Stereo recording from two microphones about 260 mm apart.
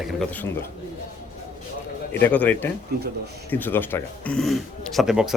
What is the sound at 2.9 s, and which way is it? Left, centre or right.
Speech, right.